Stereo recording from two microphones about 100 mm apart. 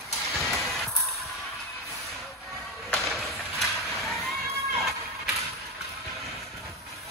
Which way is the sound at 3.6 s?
Centre (ahead or behind).